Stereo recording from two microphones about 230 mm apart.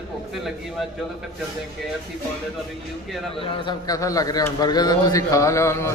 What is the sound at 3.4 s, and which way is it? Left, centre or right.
A man's voice, left.